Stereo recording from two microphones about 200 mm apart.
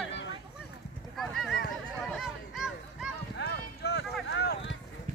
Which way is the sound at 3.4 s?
55° left (ahead or behind).